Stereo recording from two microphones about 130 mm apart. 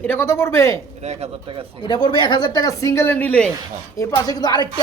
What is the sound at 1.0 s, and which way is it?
Speech, 55° right (ahead or behind).